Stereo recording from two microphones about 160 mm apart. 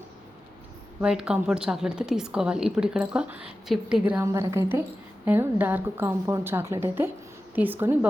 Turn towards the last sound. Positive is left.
turn(degrees=-15)  # may be behind; listen again after turning